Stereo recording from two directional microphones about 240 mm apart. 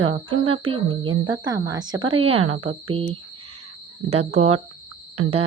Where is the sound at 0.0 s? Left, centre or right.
Right.